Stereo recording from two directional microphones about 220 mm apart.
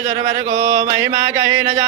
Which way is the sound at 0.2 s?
20° right (ahead or behind).